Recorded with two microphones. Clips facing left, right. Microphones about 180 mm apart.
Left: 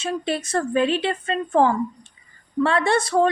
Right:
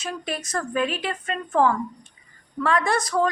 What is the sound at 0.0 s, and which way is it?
A woman's voice, 30° left (ahead or behind).